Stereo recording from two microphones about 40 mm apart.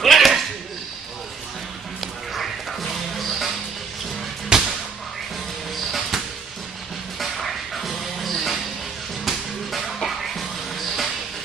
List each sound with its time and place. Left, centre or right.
0.0 s a sound: centre
2.0 s music: centre
4.5 s music: right
5.9 s music: centre